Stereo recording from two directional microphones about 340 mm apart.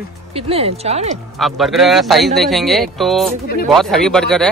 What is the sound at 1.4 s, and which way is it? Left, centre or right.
Speech, centre.